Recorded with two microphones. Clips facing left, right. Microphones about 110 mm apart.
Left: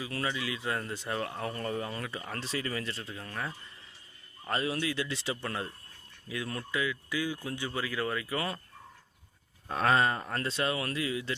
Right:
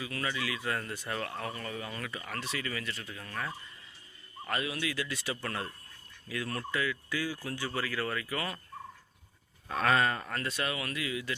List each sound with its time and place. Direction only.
0.0 s speech: 25° left (ahead or behind)
1.5 s speech: 35° left (ahead or behind)
9.6 s speech: 30° left (ahead or behind)